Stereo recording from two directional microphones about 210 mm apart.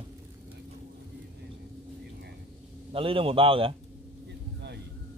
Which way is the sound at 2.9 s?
25° right (ahead or behind).